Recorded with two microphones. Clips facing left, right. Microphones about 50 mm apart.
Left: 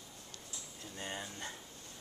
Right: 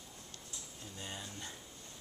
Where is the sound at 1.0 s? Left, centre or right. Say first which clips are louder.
Left 4 dB; left.